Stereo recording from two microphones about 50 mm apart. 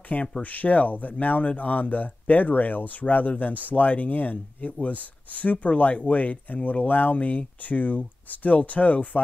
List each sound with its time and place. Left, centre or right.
0.4 s speech: left